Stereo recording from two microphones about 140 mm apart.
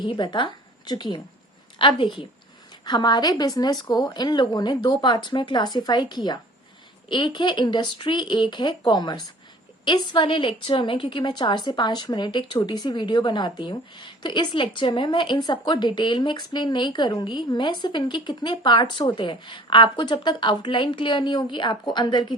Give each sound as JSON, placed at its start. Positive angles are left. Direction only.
{"t": 0.0, "sound": "a woman's voice", "side_deg": 35}